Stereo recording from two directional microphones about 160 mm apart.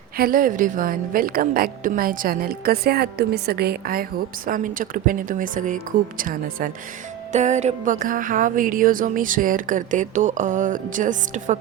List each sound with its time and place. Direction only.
0.2 s a woman's voice: 60° right (ahead or behind)
4.4 s a woman's voice: 60° right (ahead or behind)
7.3 s music: 45° right (ahead or behind)